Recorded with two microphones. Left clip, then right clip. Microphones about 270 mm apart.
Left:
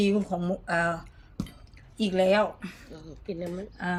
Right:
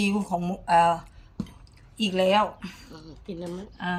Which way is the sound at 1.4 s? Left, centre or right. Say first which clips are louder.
Right 1 dB; left.